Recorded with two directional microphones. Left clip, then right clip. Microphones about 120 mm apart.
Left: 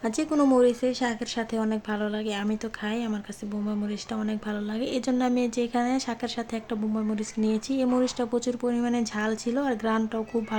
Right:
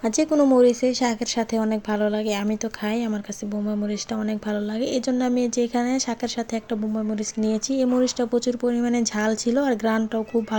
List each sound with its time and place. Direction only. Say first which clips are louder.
0.3 s speech: right 4 dB; 15° right (ahead or behind)
0.6 s speech: right 5 dB; 25° right (ahead or behind)